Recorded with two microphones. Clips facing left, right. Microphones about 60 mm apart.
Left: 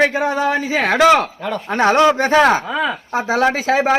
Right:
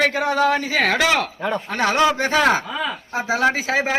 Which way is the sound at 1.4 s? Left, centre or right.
Centre.